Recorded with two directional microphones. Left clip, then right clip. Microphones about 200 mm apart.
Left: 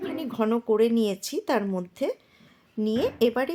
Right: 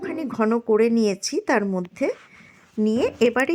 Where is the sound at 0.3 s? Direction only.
15° right (ahead or behind).